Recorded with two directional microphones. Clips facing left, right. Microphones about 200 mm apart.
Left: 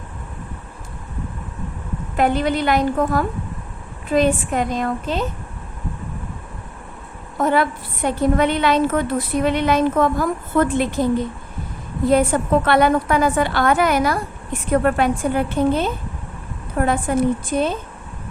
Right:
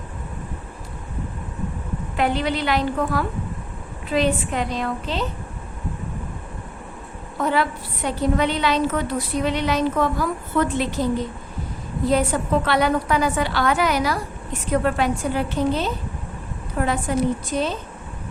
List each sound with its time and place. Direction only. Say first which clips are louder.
2.1 s a woman's voice: left 4 dB; 45° left (ahead or behind)
7.3 s a woman's voice: left 3 dB; 45° left (ahead or behind)
12.0 s a woman's voice: left 4 dB; 55° left (ahead or behind)